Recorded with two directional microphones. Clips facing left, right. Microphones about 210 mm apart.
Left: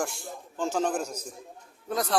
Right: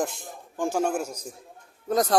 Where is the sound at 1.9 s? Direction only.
40° right (ahead or behind).